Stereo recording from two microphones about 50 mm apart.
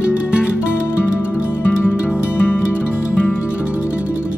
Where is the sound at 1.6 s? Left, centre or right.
Left.